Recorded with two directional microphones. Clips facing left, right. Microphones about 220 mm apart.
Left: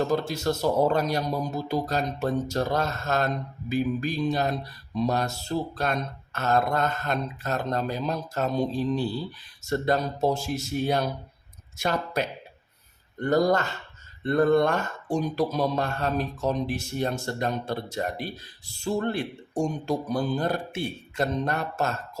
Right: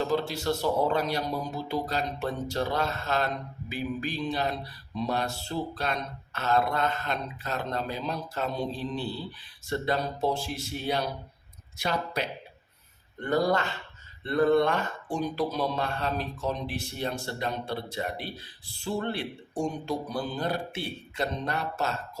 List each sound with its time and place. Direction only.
0.0 s a man's voice: 45° left (ahead or behind)